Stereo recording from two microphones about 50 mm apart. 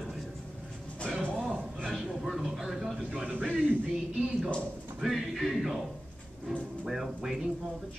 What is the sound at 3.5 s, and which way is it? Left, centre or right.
Speech, right.